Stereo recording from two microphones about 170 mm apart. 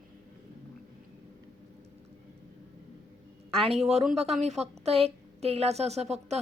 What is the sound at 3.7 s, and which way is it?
Speech, centre (ahead or behind).